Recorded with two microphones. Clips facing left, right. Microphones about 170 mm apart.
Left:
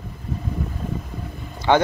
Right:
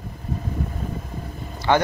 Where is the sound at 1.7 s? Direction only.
15° left (ahead or behind).